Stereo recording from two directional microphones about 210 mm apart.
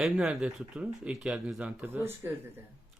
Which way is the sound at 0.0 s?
Centre (ahead or behind).